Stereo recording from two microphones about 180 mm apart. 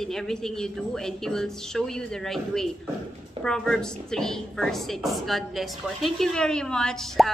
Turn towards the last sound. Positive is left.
turn(degrees=5)  # may be behind; listen again after turning